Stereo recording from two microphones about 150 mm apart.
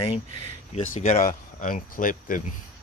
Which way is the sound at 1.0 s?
60° left (ahead or behind).